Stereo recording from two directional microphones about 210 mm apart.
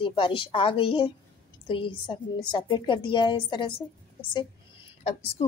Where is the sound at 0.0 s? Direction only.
25° left (ahead or behind).